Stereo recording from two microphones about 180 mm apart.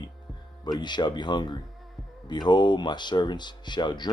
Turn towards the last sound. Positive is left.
turn(degrees=25)  # may be behind; listen again after turning